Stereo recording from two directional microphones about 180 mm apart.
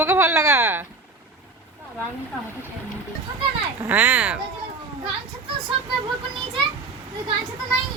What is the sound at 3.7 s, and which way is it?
Speech, 10° right (ahead or behind).